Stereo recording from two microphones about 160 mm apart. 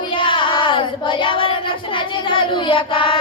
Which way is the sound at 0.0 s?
30° left (ahead or behind).